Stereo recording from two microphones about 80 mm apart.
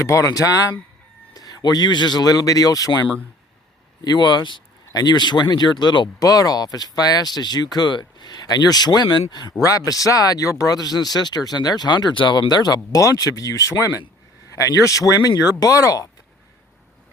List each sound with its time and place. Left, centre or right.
0.0 s speech: left
4.0 s speech: left
4.9 s speech: left
6.1 s speech: left
9.5 s speech: left